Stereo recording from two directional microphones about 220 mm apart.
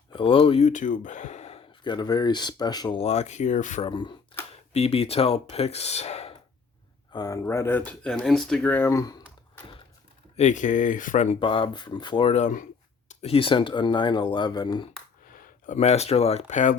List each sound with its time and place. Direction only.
0.1 s speech: 25° left (ahead or behind)
3.8 s speech: 20° left (ahead or behind)
7.1 s speech: 15° left (ahead or behind)
10.3 s speech: 35° left (ahead or behind)
15.3 s speech: 35° left (ahead or behind)